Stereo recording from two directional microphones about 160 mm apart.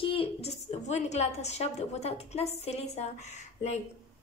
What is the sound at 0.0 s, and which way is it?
A woman's voice, 35° left (ahead or behind).